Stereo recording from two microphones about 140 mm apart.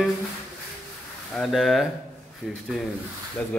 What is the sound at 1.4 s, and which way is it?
Speech, centre (ahead or behind).